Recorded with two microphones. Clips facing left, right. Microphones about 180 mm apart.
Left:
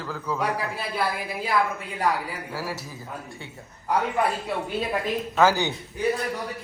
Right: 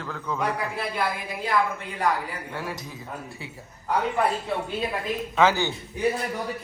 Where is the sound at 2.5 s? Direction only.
5° left (ahead or behind).